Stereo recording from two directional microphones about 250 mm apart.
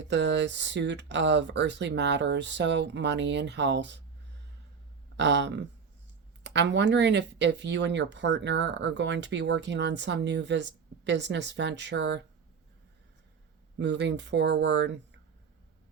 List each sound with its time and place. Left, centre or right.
0.1 s speech: right
5.1 s speech: right
13.7 s speech: right